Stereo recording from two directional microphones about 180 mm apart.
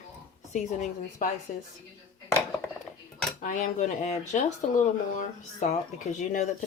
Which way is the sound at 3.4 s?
45° left (ahead or behind).